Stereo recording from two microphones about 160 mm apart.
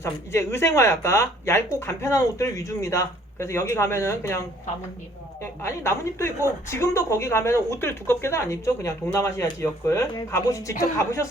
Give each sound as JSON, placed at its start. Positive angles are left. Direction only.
{"t": 0.0, "sound": "speech", "side_deg": 15}